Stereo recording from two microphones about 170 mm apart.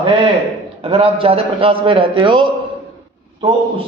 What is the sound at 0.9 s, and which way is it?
A man's voice, 35° right (ahead or behind).